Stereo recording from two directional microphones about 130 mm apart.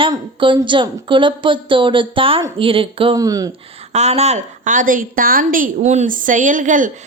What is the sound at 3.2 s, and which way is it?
Speech, 25° right (ahead or behind).